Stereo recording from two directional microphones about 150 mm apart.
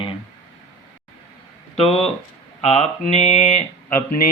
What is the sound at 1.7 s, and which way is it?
Speech, 40° left (ahead or behind).